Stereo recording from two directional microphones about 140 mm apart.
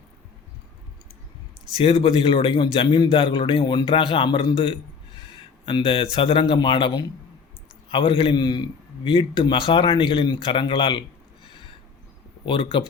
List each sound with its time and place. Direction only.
1.7 s a man's voice: 40° left (ahead or behind)
12.5 s a man's voice: 40° left (ahead or behind)